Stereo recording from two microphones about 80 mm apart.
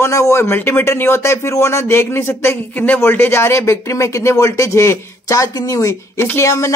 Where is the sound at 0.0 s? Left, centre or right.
Left.